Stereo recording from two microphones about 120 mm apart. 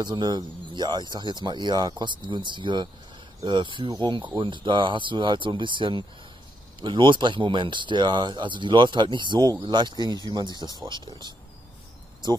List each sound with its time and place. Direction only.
0.0 s speech: 35° right (ahead or behind)